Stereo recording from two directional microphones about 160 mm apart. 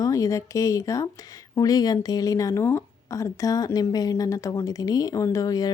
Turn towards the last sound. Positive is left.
turn(degrees=20)  # may be behind; listen again after turning